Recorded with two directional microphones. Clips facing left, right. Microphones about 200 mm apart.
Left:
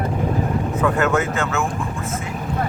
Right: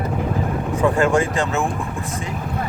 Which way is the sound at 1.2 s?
35° right (ahead or behind).